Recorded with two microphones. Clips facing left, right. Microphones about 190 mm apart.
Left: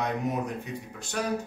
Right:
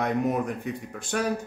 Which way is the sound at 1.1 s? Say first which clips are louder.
Right 4 dB; 55° right (ahead or behind).